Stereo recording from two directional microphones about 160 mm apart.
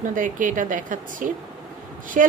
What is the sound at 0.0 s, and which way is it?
A woman's voice, 55° right (ahead or behind).